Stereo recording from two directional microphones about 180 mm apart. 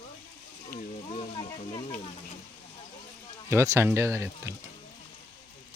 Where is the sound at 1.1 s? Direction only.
30° left (ahead or behind).